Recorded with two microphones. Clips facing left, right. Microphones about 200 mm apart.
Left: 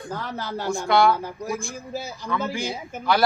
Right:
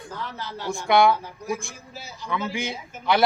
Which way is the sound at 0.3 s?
45° left (ahead or behind).